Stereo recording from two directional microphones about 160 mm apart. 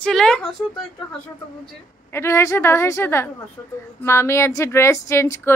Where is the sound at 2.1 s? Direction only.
15° left (ahead or behind).